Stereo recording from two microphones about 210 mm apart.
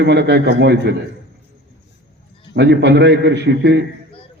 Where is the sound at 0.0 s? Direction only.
55° right (ahead or behind).